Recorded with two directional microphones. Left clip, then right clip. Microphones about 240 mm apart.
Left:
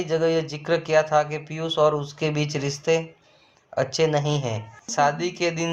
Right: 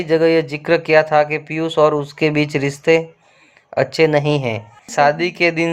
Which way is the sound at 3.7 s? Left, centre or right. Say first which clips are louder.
Right 7 dB; right.